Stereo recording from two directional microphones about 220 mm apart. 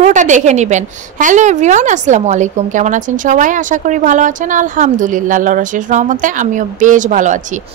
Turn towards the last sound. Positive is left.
turn(degrees=-35)  # may be behind; listen again after turning